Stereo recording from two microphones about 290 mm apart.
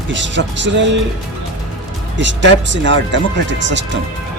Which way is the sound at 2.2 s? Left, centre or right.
Right.